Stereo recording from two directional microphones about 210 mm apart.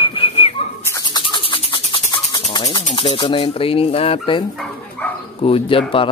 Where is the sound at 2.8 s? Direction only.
35° left (ahead or behind).